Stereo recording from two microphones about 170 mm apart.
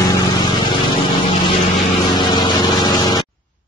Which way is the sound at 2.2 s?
25° left (ahead or behind).